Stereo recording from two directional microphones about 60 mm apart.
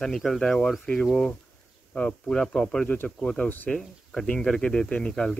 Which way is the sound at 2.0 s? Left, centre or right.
Centre.